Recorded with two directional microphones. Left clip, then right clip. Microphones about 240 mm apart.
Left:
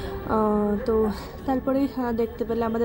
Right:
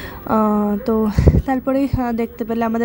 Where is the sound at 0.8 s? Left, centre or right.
Right.